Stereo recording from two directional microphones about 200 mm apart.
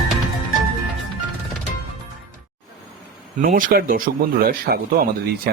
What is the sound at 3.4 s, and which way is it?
A man's voice, 45° right (ahead or behind).